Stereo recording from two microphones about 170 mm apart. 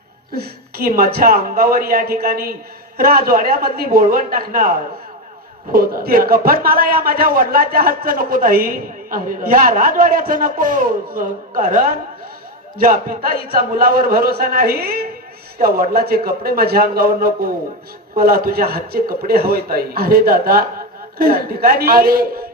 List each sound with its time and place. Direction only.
0.4 s speech: 60° right (ahead or behind)
5.7 s speech: 60° right (ahead or behind)